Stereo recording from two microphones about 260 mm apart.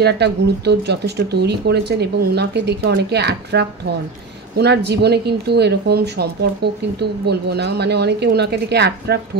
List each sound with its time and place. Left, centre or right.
0.0 s speech: right